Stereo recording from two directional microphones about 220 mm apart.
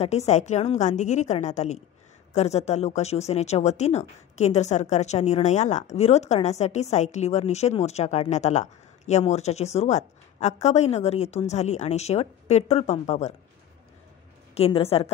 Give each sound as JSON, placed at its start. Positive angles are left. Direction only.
{"t": 0.0, "sound": "a woman's voice", "side_deg": 30}
{"t": 14.5, "sound": "speech", "side_deg": 25}